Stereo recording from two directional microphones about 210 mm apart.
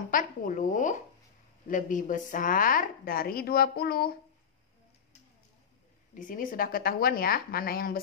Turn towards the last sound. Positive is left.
turn(degrees=45)  # may be behind; listen again after turning